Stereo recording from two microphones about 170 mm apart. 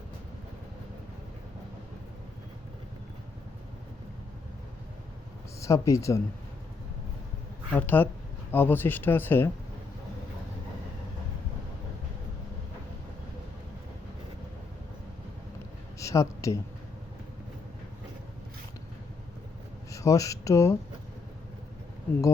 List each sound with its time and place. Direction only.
5.5 s speech: 15° left (ahead or behind)
7.7 s speech: 10° left (ahead or behind)
16.0 s speech: 20° left (ahead or behind)
19.9 s speech: 20° left (ahead or behind)